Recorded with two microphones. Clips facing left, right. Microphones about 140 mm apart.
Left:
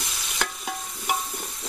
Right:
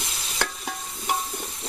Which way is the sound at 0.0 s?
25° right (ahead or behind).